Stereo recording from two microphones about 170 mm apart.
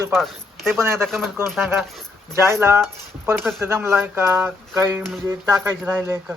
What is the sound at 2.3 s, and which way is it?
Speech, 15° right (ahead or behind).